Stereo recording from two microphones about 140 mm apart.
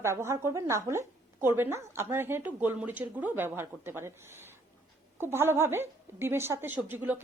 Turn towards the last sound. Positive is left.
turn(degrees=-10)  # may be behind; listen again after turning